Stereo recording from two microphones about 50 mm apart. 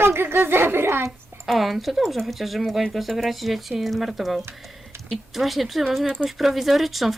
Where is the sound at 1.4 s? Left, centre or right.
Centre.